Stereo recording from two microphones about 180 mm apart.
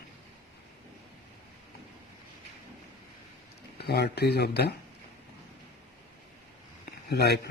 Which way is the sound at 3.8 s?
65° left (ahead or behind).